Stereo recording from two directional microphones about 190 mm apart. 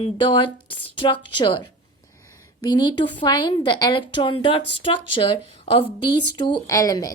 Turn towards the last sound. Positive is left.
turn(degrees=20)  # may be behind; listen again after turning